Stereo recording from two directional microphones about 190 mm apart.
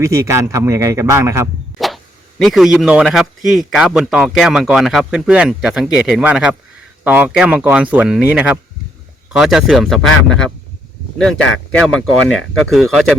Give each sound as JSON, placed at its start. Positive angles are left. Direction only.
{"t": 0.0, "sound": "speech", "side_deg": -15}
{"t": 1.8, "sound": "a sound", "side_deg": 0}
{"t": 2.4, "sound": "a man's voice", "side_deg": 0}